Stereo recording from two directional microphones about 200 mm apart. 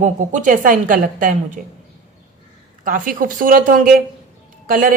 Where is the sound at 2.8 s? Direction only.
45° right (ahead or behind).